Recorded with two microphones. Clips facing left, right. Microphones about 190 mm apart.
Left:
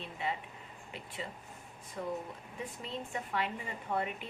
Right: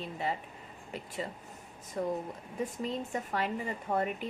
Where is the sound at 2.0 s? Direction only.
40° right (ahead or behind).